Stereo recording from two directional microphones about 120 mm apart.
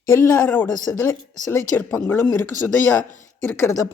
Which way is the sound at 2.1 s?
15° left (ahead or behind).